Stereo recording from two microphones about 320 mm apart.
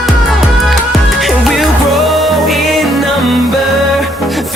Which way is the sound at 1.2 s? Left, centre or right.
Centre.